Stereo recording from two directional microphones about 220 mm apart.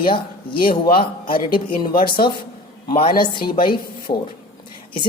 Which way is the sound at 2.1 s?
20° left (ahead or behind).